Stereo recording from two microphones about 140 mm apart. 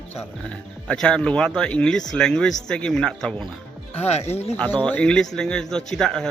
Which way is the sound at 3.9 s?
50° left (ahead or behind).